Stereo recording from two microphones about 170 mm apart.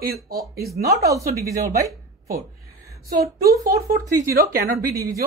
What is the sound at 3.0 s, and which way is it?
A woman's voice, 65° right (ahead or behind).